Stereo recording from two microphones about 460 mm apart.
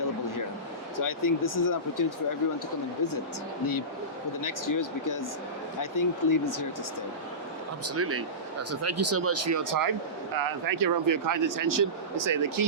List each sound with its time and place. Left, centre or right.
0.9 s speech: left
4.4 s speech: left
7.9 s speech: right